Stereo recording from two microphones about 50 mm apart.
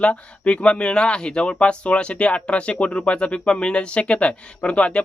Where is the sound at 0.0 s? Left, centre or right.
Left.